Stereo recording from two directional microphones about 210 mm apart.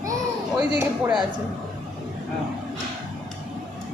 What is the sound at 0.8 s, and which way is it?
Speech, 10° right (ahead or behind).